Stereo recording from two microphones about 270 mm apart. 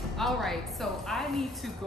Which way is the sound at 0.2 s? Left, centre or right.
Centre.